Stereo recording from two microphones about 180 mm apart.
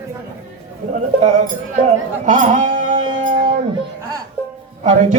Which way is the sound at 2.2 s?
45° right (ahead or behind).